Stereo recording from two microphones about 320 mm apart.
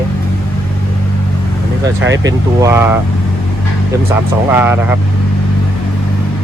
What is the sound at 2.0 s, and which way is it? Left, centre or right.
Speech, right.